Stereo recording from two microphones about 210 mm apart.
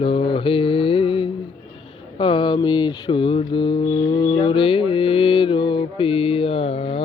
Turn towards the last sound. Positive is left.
turn(degrees=25)  # may be behind; listen again after turning